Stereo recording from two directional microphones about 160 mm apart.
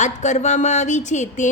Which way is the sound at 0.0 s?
50° left (ahead or behind).